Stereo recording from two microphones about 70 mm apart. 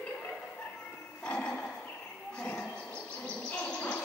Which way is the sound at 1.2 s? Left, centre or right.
Centre.